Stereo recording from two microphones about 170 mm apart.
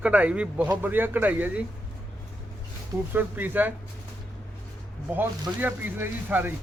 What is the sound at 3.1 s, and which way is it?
Speech, 10° right (ahead or behind).